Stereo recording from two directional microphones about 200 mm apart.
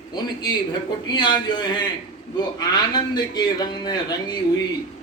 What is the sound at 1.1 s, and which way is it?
A man's voice, 20° left (ahead or behind).